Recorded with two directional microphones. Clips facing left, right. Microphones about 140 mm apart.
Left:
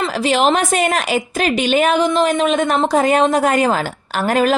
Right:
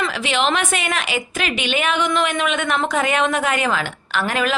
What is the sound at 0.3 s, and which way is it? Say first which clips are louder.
A woman's voice: left 6 dB; 40° left (ahead or behind).